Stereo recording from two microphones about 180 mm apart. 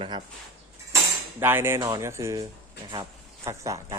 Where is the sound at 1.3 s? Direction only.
15° right (ahead or behind).